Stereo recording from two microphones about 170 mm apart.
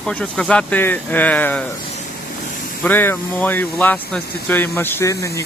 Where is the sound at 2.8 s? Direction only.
10° left (ahead or behind).